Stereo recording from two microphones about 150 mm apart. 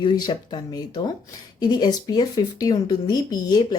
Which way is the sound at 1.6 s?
30° left (ahead or behind).